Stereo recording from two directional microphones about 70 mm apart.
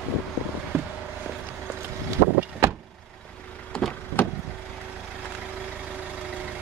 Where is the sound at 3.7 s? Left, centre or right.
Centre.